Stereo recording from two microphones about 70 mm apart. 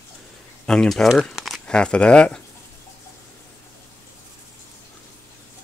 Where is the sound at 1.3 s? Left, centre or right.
Centre.